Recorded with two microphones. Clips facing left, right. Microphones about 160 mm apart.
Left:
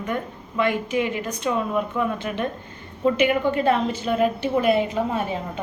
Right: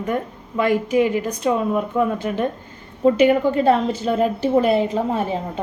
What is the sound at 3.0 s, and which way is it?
A woman's voice, 30° right (ahead or behind).